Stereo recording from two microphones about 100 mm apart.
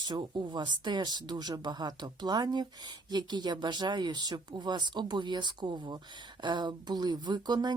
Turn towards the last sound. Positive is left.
turn(degrees=-45)  # may be behind; listen again after turning